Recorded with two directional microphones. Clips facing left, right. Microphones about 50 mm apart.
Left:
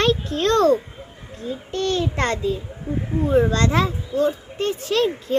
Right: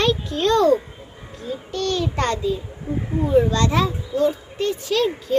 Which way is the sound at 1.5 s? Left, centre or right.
Left.